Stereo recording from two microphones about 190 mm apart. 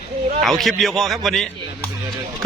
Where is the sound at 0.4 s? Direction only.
Centre (ahead or behind).